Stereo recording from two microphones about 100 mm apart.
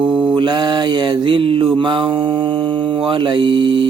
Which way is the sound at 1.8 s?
55° right (ahead or behind).